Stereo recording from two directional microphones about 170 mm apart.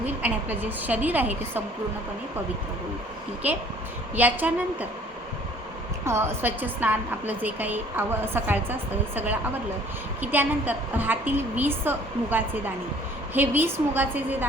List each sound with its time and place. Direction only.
0.2 s a woman's voice: 10° right (ahead or behind)
3.4 s a woman's voice: 10° right (ahead or behind)
6.1 s a woman's voice: 15° right (ahead or behind)
10.2 s a woman's voice: 10° right (ahead or behind)